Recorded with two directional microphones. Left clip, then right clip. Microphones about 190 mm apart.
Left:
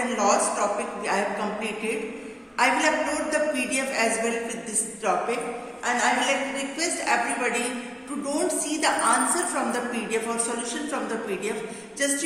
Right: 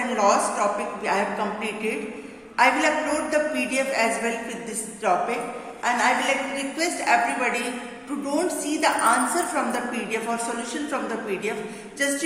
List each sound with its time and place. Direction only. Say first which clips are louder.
0.0 s a woman's voice: right 2 dB; 20° right (ahead or behind)
12.0 s a woman's voice: right 2 dB; 20° right (ahead or behind)